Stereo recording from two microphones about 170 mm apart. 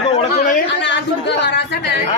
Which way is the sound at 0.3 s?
65° left (ahead or behind).